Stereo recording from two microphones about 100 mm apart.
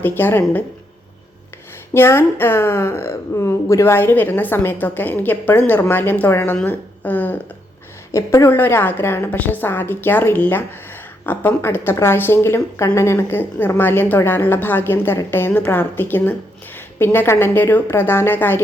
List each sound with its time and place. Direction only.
0.0 s speech: 20° left (ahead or behind)
1.9 s a woman's voice: 25° left (ahead or behind)
8.1 s a woman's voice: 30° left (ahead or behind)
8.4 s speech: 20° left (ahead or behind)